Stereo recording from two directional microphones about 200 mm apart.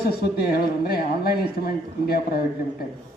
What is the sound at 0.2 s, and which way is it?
Speech, 50° left (ahead or behind).